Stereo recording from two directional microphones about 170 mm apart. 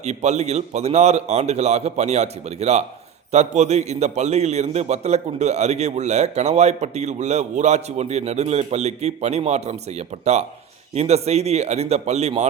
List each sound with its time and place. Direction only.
0.0 s a man's voice: 40° right (ahead or behind)